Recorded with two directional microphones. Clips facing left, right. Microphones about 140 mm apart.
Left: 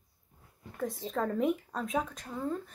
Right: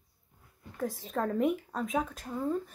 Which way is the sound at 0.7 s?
Centre (ahead or behind).